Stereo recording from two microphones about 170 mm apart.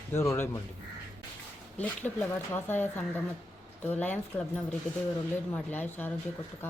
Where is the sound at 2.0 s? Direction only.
10° left (ahead or behind).